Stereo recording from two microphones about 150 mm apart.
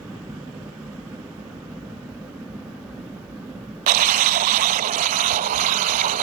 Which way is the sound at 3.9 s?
65° right (ahead or behind).